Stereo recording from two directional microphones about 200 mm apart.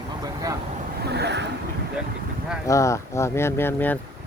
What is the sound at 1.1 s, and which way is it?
Vehicle, 55° right (ahead or behind).